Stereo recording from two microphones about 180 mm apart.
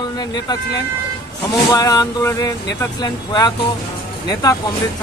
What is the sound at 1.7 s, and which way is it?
Speech, 20° left (ahead or behind).